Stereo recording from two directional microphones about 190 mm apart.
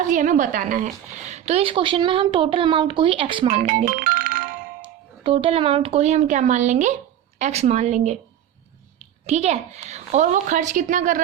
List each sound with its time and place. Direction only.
0.0 s a woman's voice: 40° right (ahead or behind)
3.9 s music: 50° right (ahead or behind)
5.2 s a woman's voice: 30° right (ahead or behind)
9.2 s a woman's voice: 35° right (ahead or behind)